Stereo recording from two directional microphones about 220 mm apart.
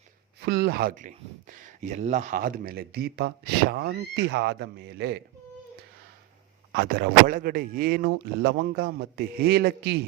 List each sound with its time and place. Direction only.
0.4 s speech: 50° right (ahead or behind)
6.7 s speech: 45° right (ahead or behind)